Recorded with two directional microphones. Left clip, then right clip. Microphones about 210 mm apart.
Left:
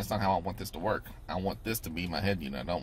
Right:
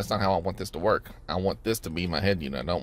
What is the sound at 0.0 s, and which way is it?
Speech, 40° right (ahead or behind).